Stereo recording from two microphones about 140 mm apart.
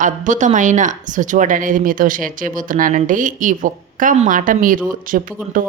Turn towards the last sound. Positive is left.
turn(degrees=-75)  # may be behind; listen again after turning